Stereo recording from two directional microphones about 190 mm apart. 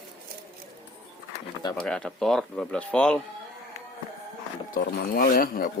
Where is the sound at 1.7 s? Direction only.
5° left (ahead or behind).